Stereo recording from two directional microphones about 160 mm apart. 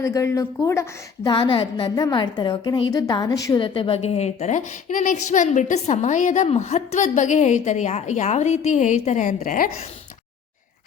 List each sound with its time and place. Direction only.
0.0 s a woman's voice: 20° left (ahead or behind)
1.3 s a woman's voice: 30° left (ahead or behind); by 9.7 s 60° left (ahead or behind)